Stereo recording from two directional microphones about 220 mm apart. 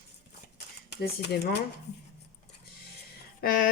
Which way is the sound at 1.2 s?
50° left (ahead or behind).